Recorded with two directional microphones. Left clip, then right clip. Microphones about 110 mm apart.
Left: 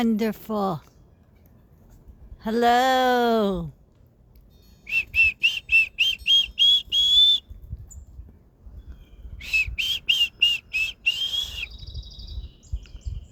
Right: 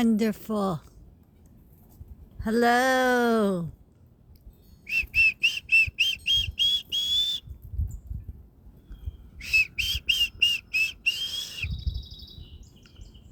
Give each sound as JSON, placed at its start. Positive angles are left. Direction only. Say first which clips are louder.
{"t": 0.0, "sound": "speech", "louder": "left 1 dB", "side_deg": 15}
{"t": 2.4, "sound": "speech", "louder": "left 3 dB", "side_deg": 15}
{"t": 4.9, "sound": "whistle", "louder": "left 2 dB", "side_deg": 15}
{"t": 9.4, "sound": "a sound", "louder": "even", "side_deg": 15}